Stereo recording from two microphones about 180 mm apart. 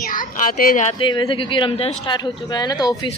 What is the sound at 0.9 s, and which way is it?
Speech, 25° left (ahead or behind).